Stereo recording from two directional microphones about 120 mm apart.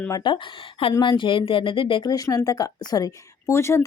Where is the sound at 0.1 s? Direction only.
40° left (ahead or behind).